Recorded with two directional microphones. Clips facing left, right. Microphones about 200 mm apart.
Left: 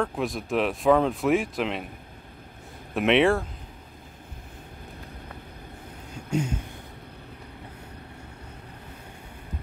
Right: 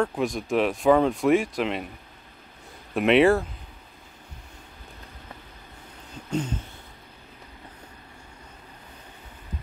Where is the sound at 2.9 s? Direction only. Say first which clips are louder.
Right 2 dB; centre (ahead or behind).